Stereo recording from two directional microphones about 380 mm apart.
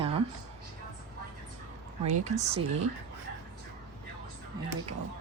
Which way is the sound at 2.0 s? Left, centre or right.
Centre.